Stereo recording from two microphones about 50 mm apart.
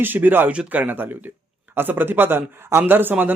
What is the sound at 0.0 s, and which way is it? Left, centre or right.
A man's voice, right.